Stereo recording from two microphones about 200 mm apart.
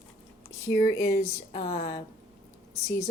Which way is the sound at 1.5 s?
30° left (ahead or behind).